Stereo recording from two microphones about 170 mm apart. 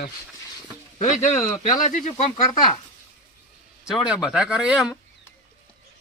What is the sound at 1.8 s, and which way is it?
Speech, 50° left (ahead or behind).